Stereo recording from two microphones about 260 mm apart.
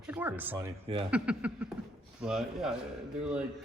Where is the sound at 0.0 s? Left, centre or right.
Centre.